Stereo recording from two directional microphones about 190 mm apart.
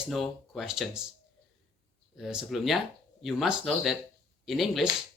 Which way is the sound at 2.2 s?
Centre (ahead or behind).